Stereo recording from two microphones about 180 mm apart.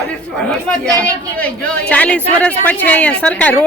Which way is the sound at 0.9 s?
5° left (ahead or behind).